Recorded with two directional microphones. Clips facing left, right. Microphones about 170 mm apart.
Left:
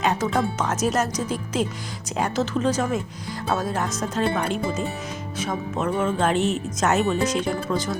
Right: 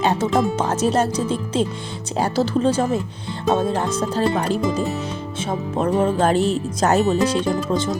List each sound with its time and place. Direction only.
0.0 s speech: 30° right (ahead or behind)